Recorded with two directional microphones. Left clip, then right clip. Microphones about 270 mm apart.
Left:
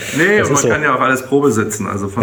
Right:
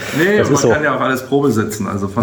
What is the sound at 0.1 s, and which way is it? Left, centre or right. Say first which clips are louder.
Speech: left 1 dB; centre.